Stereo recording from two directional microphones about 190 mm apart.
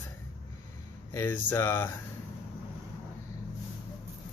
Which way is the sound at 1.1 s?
15° left (ahead or behind).